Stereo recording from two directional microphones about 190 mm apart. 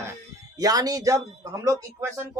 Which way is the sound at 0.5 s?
20° right (ahead or behind).